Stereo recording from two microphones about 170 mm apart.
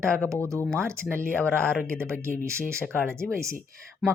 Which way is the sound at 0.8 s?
15° right (ahead or behind).